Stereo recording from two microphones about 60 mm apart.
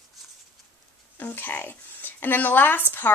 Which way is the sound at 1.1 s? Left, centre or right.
Left.